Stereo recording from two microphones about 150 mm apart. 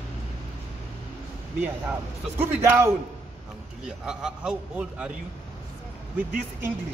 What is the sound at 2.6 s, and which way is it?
Speech, 20° right (ahead or behind).